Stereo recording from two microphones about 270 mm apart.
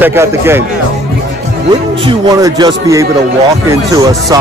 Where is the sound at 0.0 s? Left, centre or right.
Centre.